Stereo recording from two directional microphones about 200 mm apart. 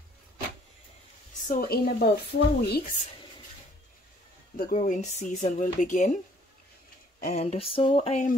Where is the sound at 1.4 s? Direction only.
45° left (ahead or behind).